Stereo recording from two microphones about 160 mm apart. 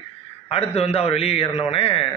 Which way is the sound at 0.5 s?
40° left (ahead or behind).